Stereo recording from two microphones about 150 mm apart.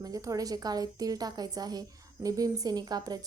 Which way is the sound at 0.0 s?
25° right (ahead or behind).